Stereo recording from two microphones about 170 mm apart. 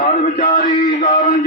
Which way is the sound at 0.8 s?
45° left (ahead or behind).